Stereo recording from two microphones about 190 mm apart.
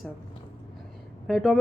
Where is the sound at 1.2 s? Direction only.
Centre (ahead or behind).